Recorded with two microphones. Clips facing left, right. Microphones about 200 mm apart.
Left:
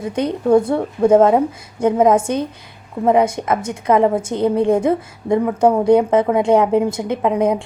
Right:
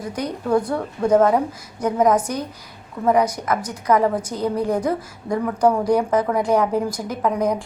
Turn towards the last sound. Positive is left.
turn(degrees=25)  # may be behind; listen again after turning